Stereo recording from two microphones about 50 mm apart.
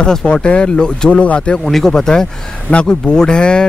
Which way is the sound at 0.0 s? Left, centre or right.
Centre.